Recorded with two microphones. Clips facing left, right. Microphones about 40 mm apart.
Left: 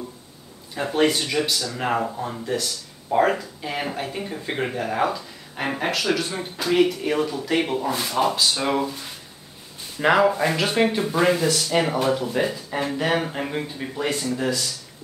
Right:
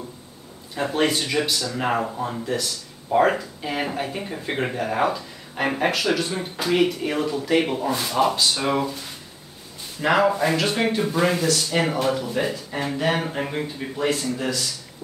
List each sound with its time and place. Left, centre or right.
0.7 s speech: centre
10.0 s speech: left
10.3 s speech: centre